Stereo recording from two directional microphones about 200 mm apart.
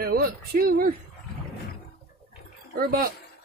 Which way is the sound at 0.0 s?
50° right (ahead or behind).